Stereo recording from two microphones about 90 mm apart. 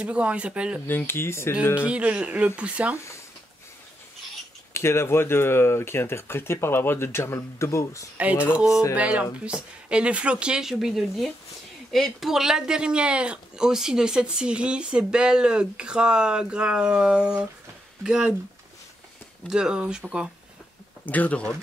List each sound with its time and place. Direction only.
0.0 s speech: 15° right (ahead or behind)
0.8 s speech: 25° left (ahead or behind)
1.8 s speech: 15° right (ahead or behind)
4.7 s speech: 30° left (ahead or behind)
8.5 s speech: 5° right (ahead or behind)
8.9 s speech: 15° right (ahead or behind)
19.5 s speech: 10° right (ahead or behind)
21.0 s speech: 20° left (ahead or behind)